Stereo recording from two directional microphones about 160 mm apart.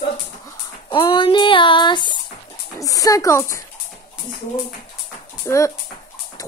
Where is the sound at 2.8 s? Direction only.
20° left (ahead or behind).